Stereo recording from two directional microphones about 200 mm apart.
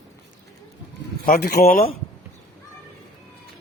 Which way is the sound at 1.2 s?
50° left (ahead or behind).